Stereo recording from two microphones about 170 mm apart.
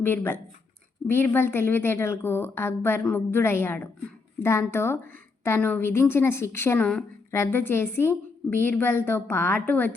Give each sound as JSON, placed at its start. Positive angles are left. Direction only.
{"t": 0.0, "sound": "a woman's voice", "side_deg": 15}